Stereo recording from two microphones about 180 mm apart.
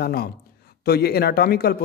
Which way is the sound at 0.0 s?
60° left (ahead or behind).